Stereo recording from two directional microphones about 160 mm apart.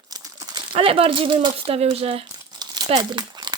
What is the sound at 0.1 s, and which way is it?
Speech, 20° right (ahead or behind).